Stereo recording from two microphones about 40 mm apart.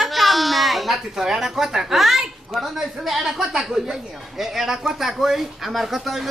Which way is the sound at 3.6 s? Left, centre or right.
Centre.